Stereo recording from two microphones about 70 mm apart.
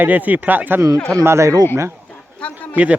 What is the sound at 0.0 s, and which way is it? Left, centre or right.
Speech, right.